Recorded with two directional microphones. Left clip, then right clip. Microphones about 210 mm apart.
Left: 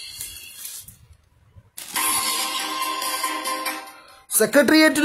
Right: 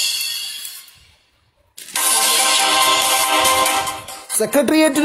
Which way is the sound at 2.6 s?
45° right (ahead or behind).